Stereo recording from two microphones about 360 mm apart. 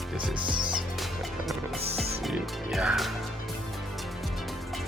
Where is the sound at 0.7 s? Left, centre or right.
Centre.